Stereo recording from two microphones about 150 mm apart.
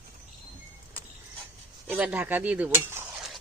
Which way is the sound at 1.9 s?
10° right (ahead or behind).